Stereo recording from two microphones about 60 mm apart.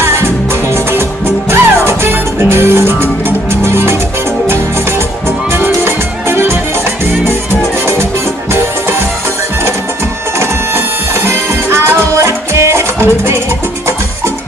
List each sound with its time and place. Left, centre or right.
0.0 s music: right
1.5 s music: right
5.9 s music: right
11.2 s music: right